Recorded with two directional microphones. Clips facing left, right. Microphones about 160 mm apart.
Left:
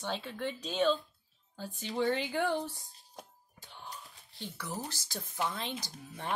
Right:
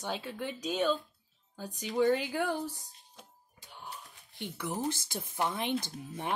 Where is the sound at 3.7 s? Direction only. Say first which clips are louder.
Right 1 dB; 15° right (ahead or behind).